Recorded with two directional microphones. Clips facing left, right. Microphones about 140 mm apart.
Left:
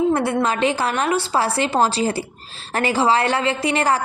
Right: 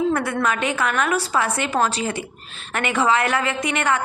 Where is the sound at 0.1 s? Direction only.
30° left (ahead or behind).